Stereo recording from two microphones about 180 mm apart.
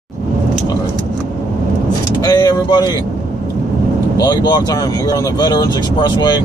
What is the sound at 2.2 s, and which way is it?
Speech, 20° left (ahead or behind).